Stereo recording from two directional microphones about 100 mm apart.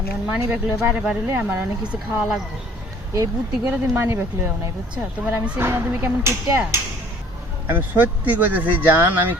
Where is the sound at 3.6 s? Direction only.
25° right (ahead or behind).